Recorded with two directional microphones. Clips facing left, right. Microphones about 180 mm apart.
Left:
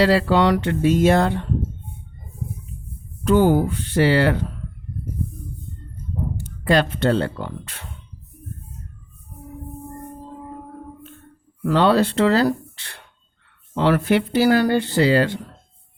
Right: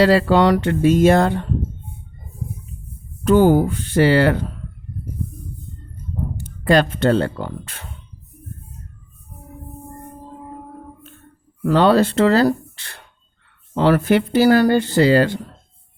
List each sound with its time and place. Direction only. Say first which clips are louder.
0.0 s speech: right 3 dB; 50° right (ahead or behind)
3.2 s speech: right 3 dB; 45° right (ahead or behind)
6.3 s speech: right 3 dB; 45° right (ahead or behind)
11.6 s speech: right 3 dB; 45° right (ahead or behind)